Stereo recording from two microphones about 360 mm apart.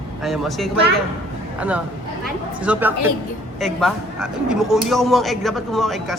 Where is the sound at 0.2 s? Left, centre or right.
Centre.